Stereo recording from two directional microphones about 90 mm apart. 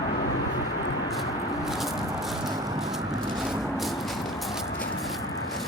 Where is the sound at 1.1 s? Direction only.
Centre (ahead or behind).